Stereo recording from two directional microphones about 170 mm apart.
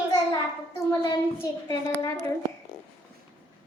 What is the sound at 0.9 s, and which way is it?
A child's voice, 20° left (ahead or behind).